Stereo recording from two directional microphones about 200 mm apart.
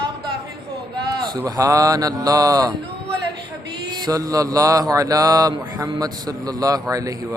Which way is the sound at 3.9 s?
20° right (ahead or behind).